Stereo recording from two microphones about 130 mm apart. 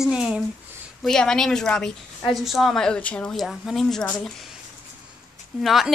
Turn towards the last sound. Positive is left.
turn(degrees=0)  # may be behind; listen again after turning